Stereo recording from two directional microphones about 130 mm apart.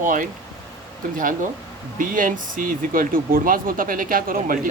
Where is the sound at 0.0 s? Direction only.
90° right.